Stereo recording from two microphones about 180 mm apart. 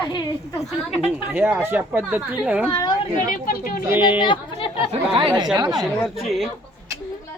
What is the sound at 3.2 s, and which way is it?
Speech, 55° left (ahead or behind).